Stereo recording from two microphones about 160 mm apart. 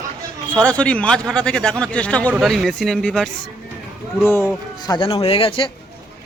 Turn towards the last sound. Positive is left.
turn(degrees=35)  # may be behind; listen again after turning